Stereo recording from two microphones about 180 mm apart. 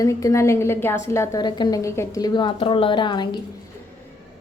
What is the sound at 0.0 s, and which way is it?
A woman's voice, 20° left (ahead or behind).